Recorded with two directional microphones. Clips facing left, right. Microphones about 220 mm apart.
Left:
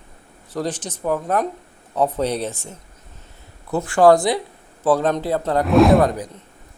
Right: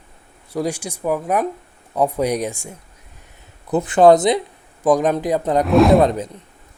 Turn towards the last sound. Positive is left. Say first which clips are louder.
# right 2 dB
turn(degrees=-25)  # may be behind; listen again after turning